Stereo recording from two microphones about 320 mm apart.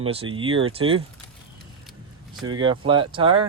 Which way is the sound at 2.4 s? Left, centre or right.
Centre.